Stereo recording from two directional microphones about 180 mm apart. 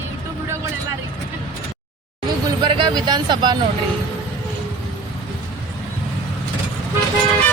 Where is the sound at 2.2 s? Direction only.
25° right (ahead or behind).